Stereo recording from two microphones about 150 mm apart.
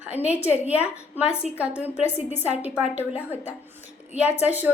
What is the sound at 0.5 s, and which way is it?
Speech, 10° right (ahead or behind).